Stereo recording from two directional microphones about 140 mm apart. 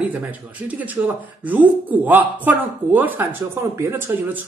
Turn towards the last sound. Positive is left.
turn(degrees=-15)  # may be behind; listen again after turning